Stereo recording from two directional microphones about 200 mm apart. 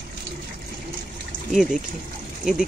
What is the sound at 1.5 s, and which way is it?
Speech, 5° right (ahead or behind).